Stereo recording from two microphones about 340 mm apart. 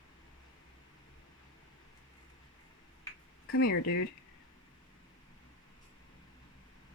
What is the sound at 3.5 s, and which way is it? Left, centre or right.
Speech, left.